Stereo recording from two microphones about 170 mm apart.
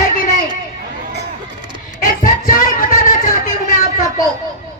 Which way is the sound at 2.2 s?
50° left (ahead or behind).